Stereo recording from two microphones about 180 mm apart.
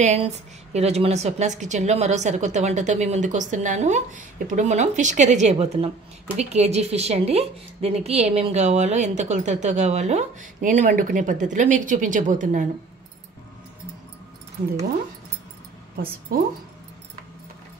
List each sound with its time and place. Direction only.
0.0 s a woman's voice: 40° right (ahead or behind)